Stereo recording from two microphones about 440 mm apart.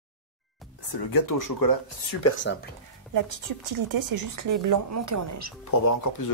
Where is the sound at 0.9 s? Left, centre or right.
Left.